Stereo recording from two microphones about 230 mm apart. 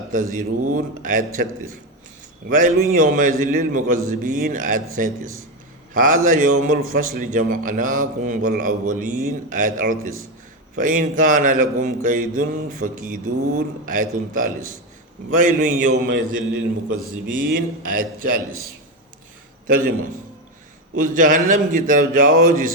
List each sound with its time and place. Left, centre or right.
0.3 s mantra: right
2.5 s mantra: right
17.2 s mantra: right
19.6 s a man's voice: right
20.9 s mantra: right